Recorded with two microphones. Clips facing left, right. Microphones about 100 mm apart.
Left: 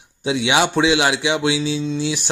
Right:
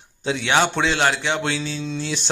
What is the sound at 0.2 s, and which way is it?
A man's voice, 15° left (ahead or behind).